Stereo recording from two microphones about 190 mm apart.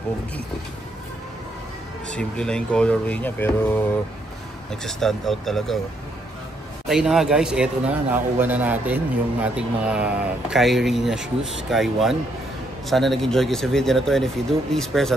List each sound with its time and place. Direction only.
2.0 s a man's voice: 5° left (ahead or behind)
4.8 s a man's voice: centre (ahead or behind)
6.9 s a man's voice: centre (ahead or behind)